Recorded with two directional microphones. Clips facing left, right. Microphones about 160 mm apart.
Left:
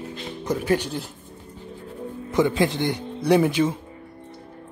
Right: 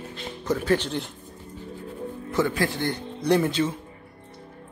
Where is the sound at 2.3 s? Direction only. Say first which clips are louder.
Left 4 dB; 20° left (ahead or behind).